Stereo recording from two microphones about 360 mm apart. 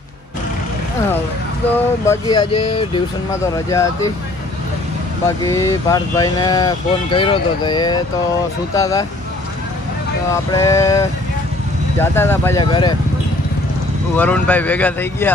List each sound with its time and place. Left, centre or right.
2.0 s speech: centre
5.4 s speech: centre
10.5 s speech: centre
14.1 s speech: centre